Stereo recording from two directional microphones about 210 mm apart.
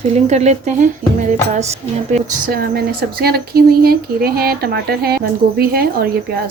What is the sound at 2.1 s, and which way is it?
Speech, 45° right (ahead or behind).